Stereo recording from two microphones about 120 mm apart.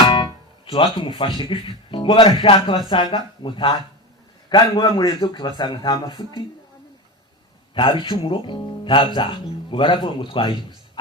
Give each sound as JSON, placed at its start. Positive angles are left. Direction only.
{"t": 0.0, "sound": "music", "side_deg": 40}
{"t": 0.6, "sound": "a sound", "side_deg": 45}
{"t": 0.9, "sound": "speech", "side_deg": 35}
{"t": 7.7, "sound": "speech", "side_deg": 40}